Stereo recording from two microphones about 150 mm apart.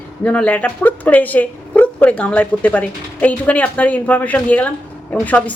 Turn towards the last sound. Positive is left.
turn(degrees=10)  # may be behind; listen again after turning